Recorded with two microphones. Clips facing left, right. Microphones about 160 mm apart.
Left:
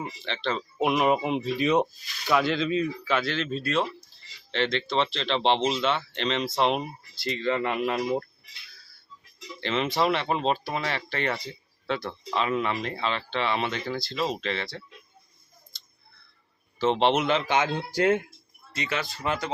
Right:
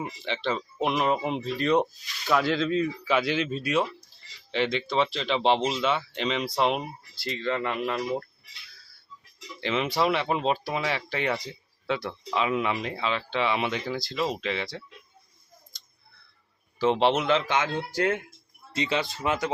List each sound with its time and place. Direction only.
0.0 s speech: 15° right (ahead or behind)
0.8 s speech: 5° left (ahead or behind)
3.2 s speech: 15° right (ahead or behind); by 7.9 s 5° left (ahead or behind)
9.6 s speech: 10° right (ahead or behind)
16.7 s speech: 10° right (ahead or behind)
18.7 s speech: 25° right (ahead or behind)